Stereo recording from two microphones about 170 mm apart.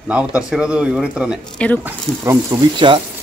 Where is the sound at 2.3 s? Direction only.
25° right (ahead or behind).